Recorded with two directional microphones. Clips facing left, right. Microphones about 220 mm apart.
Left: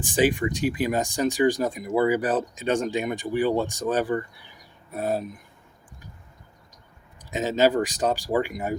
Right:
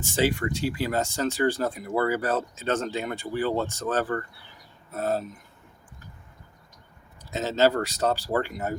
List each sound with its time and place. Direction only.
0.0 s speech: 15° left (ahead or behind)
7.2 s speech: 15° left (ahead or behind)